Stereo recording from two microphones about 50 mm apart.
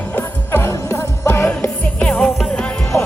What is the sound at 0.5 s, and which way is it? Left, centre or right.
Music, left.